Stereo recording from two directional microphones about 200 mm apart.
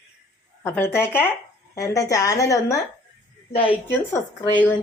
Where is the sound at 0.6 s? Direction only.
10° left (ahead or behind).